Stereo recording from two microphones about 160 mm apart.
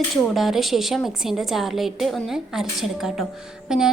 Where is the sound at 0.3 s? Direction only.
Centre (ahead or behind).